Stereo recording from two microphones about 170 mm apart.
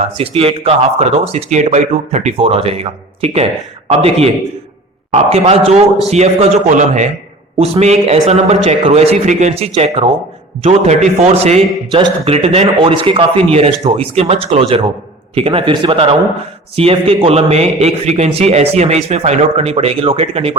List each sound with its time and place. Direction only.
0.0 s a man's voice: 35° right (ahead or behind)